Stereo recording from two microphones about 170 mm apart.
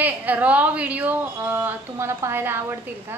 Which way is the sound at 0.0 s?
10° right (ahead or behind).